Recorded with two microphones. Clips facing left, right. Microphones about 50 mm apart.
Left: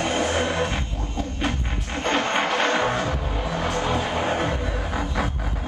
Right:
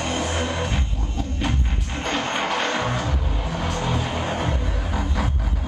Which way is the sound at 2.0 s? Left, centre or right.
Centre.